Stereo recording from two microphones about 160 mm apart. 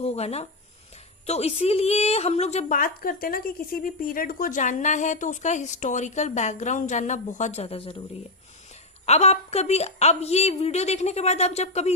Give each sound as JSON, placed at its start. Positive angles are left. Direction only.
{"t": 0.0, "sound": "a woman's voice", "side_deg": 40}
{"t": 2.7, "sound": "a woman's voice", "side_deg": 60}
{"t": 9.0, "sound": "a woman's voice", "side_deg": 40}